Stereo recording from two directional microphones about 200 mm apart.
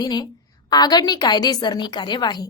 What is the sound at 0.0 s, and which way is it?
A woman's voice, 20° left (ahead or behind).